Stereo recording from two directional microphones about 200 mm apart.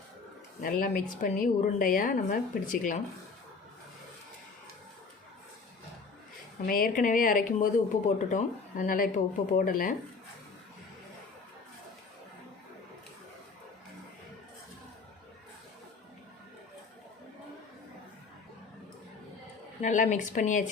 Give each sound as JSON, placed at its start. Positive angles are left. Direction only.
{"t": 0.6, "sound": "a woman's voice", "side_deg": 45}
{"t": 6.7, "sound": "a woman's voice", "side_deg": 45}
{"t": 19.8, "sound": "speech", "side_deg": 40}